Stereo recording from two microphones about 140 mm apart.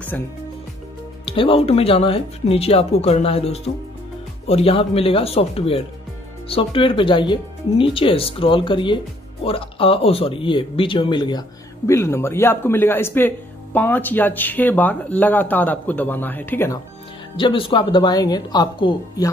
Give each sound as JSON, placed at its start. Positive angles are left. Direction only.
{"t": 0.1, "sound": "speech", "side_deg": 15}
{"t": 1.2, "sound": "speech", "side_deg": 40}
{"t": 17.4, "sound": "speech", "side_deg": 35}